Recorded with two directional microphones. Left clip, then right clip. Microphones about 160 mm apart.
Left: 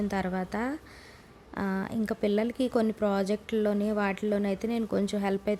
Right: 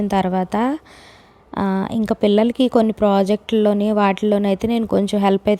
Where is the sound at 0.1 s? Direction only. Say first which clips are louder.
Right 13 dB; 35° right (ahead or behind).